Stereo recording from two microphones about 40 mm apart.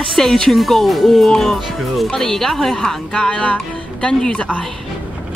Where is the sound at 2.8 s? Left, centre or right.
Centre.